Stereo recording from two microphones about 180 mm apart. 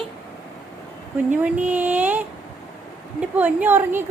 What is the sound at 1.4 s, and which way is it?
A woman's voice, 10° right (ahead or behind).